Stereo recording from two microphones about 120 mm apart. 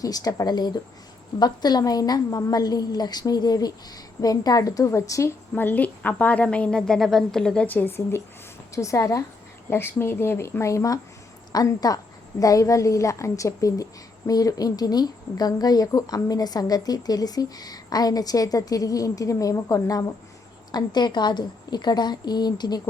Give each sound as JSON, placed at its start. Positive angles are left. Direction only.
{"t": 0.0, "sound": "speech", "side_deg": 30}
{"t": 5.5, "sound": "a woman's voice", "side_deg": 15}